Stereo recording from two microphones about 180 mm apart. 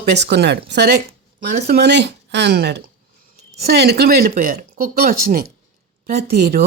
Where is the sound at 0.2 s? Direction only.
70° right (ahead or behind).